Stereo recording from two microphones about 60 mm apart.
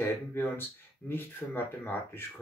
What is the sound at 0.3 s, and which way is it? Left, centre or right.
Speech, left.